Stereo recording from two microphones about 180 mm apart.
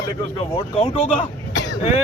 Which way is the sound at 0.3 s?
30° left (ahead or behind).